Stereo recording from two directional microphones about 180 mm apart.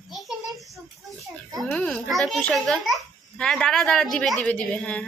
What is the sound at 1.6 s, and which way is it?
A woman's voice, 5° left (ahead or behind).